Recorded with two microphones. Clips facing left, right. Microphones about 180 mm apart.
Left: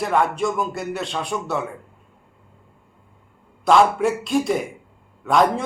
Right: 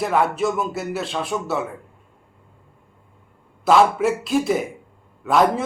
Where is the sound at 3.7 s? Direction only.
Centre (ahead or behind).